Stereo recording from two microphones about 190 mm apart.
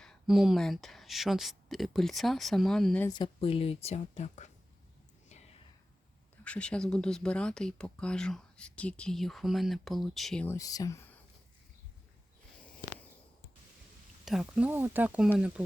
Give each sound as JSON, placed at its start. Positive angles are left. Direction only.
{"t": 0.0, "sound": "speech", "side_deg": 0}
{"t": 3.1, "sound": "speech", "side_deg": 25}
{"t": 6.4, "sound": "speech", "side_deg": 5}
{"t": 14.3, "sound": "speech", "side_deg": -5}